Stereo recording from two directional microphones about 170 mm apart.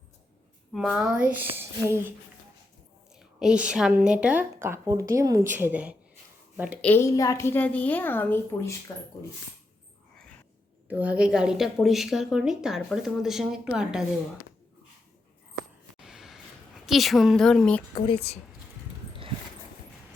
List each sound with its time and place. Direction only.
0.7 s a woman's voice: 5° right (ahead or behind)
3.2 s a woman's voice: 5° right (ahead or behind)
6.8 s a woman's voice: 15° left (ahead or behind)
10.8 s speech: 10° right (ahead or behind)
16.0 s a sound: 5° right (ahead or behind)
16.8 s speech: centre (ahead or behind)
17.9 s a woman's voice: 35° left (ahead or behind)